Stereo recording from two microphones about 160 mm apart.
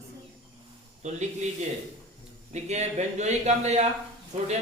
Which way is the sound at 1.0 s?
45° right (ahead or behind).